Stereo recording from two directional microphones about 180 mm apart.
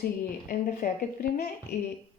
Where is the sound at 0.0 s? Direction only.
55° left (ahead or behind).